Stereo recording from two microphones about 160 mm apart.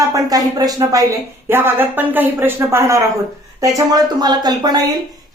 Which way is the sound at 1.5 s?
15° right (ahead or behind).